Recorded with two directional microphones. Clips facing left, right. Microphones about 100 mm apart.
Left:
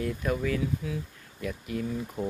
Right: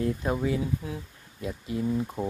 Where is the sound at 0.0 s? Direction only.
30° right (ahead or behind).